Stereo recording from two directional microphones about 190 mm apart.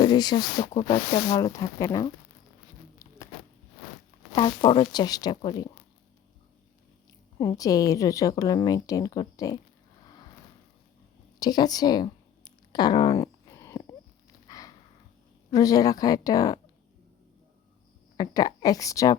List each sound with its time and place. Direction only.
0.0 s a woman's voice: 20° left (ahead or behind)
1.5 s speech: 15° left (ahead or behind)
4.3 s a woman's voice: 25° left (ahead or behind)
7.3 s a woman's voice: 15° left (ahead or behind)
11.3 s speech: 20° left (ahead or behind)
13.1 s a sound: 15° left (ahead or behind)
15.4 s a woman's voice: 20° left (ahead or behind)
18.2 s a woman's voice: 20° left (ahead or behind)